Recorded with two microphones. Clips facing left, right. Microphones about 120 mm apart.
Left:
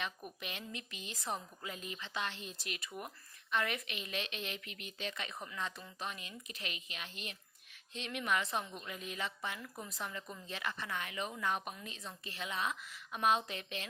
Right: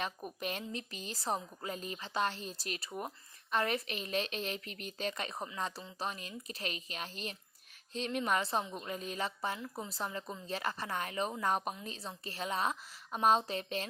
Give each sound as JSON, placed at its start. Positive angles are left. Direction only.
{"t": 0.0, "sound": "a woman's voice", "side_deg": -40}